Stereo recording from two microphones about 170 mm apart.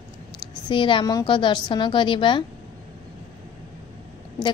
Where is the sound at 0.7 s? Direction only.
30° left (ahead or behind).